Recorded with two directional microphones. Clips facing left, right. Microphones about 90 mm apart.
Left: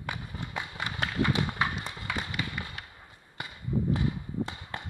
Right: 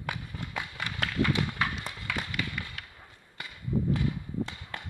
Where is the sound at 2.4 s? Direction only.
20° left (ahead or behind).